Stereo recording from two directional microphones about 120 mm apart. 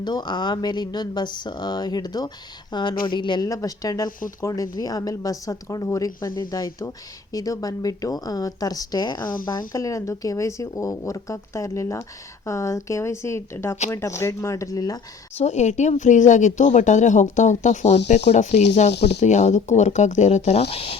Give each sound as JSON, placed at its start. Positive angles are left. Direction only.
{"t": 0.0, "sound": "speech", "side_deg": 35}
{"t": 15.4, "sound": "speech", "side_deg": 70}